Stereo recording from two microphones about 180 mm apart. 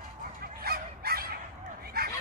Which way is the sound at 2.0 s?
60° right (ahead or behind).